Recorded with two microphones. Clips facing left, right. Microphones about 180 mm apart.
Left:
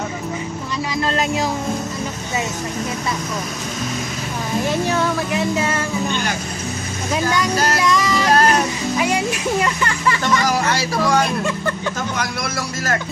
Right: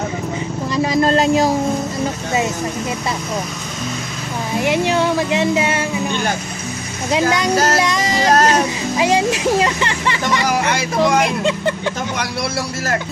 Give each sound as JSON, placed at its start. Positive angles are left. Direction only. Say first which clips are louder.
{"t": 1.0, "sound": "speech", "louder": "right 6 dB", "side_deg": -40}
{"t": 4.6, "sound": "speech", "louder": "right 4 dB", "side_deg": -15}
{"t": 7.1, "sound": "speech", "louder": "right 3 dB", "side_deg": -20}
{"t": 7.5, "sound": "speech", "louder": "right 2 dB", "side_deg": -30}